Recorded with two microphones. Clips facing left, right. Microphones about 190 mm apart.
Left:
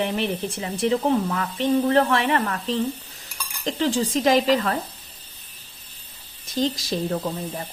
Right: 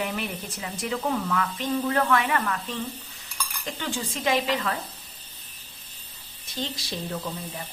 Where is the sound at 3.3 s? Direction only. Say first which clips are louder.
Left 7 dB; 35° left (ahead or behind).